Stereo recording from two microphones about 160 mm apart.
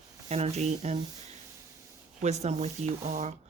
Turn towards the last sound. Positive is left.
turn(degrees=-45)  # may be behind; listen again after turning